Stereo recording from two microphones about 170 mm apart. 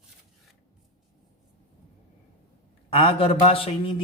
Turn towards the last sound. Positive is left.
turn(degrees=35)  # may be behind; listen again after turning